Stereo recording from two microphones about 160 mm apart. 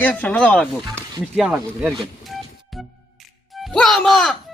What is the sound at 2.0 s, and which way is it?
Music, centre (ahead or behind).